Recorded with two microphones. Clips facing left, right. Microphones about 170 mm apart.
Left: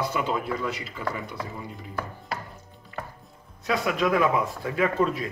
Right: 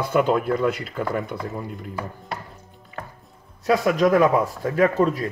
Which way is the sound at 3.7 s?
40° right (ahead or behind).